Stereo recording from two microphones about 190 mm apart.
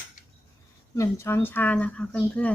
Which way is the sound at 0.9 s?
15° left (ahead or behind).